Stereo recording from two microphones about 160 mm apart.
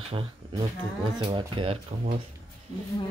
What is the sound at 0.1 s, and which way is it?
Speech, 35° right (ahead or behind).